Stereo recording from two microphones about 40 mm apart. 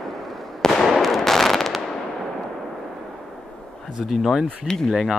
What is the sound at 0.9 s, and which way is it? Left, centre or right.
Fireworks, centre.